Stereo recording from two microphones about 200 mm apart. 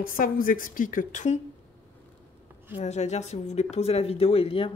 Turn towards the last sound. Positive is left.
turn(degrees=30)  # may be behind; listen again after turning